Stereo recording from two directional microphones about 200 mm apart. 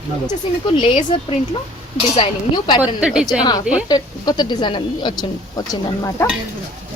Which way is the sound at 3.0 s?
5° right (ahead or behind).